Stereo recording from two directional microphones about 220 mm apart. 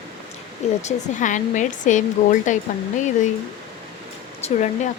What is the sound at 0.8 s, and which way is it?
Speech, 35° left (ahead or behind).